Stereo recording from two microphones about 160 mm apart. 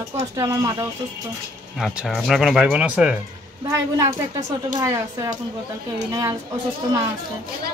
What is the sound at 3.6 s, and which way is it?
A woman's voice, 20° right (ahead or behind).